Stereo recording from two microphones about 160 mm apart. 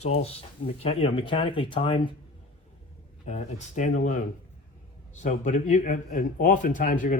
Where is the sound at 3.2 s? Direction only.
45° left (ahead or behind).